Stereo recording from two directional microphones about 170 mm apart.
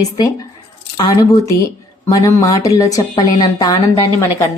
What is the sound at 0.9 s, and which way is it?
A woman's voice, 25° left (ahead or behind).